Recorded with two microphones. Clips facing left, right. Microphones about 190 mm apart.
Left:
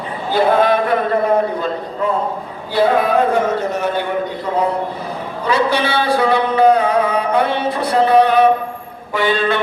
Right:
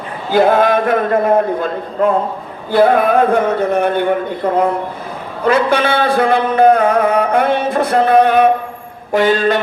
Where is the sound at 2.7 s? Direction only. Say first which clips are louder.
Right 3 dB; 55° right (ahead or behind).